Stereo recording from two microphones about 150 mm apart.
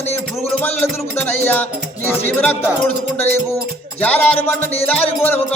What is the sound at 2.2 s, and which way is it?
Music, 15° left (ahead or behind).